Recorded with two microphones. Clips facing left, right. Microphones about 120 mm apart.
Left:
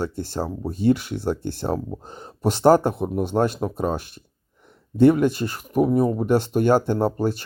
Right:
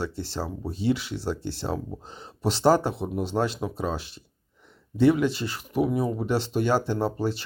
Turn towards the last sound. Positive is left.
turn(degrees=50)  # may be behind; listen again after turning